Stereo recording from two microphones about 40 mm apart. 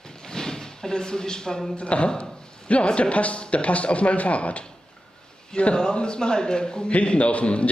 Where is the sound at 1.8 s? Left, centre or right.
Left.